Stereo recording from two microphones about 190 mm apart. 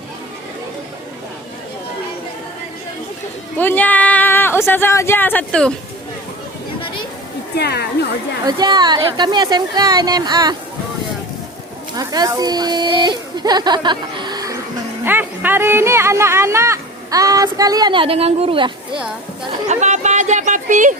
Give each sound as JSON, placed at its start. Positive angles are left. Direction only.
{"t": 3.6, "sound": "a woman's voice", "side_deg": 10}
{"t": 7.5, "sound": "a woman's voice", "side_deg": 60}
{"t": 8.4, "sound": "speech", "side_deg": -20}
{"t": 11.9, "sound": "speech", "side_deg": -20}